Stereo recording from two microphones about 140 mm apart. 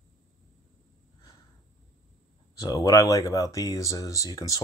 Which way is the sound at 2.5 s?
25° left (ahead or behind).